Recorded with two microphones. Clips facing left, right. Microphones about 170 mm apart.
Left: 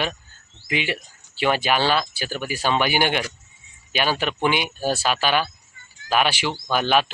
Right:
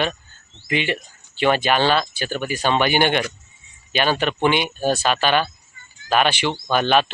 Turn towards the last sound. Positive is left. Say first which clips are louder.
# right 2 dB
turn(degrees=10)  # may be behind; listen again after turning